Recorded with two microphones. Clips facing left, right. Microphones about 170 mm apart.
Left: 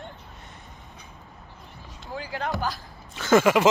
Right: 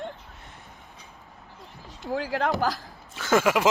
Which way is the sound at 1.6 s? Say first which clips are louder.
Right 1 dB; centre (ahead or behind).